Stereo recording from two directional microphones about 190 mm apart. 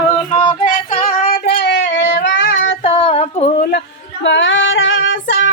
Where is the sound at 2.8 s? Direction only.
30° left (ahead or behind).